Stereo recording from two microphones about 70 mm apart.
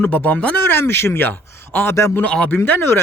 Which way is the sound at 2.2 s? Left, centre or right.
Centre.